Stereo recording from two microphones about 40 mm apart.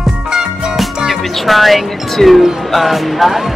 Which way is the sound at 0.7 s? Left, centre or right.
Centre.